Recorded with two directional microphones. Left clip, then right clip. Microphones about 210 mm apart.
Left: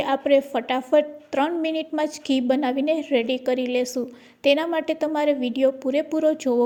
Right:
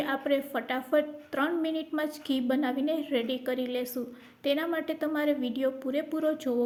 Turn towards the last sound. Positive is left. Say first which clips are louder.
# left 8 dB
turn(degrees=25)  # may be behind; listen again after turning